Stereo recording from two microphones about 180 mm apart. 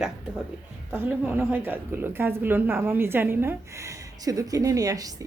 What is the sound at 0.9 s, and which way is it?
A woman's voice, 10° right (ahead or behind).